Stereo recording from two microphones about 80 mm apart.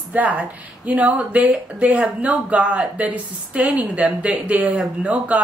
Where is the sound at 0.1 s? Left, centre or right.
Centre.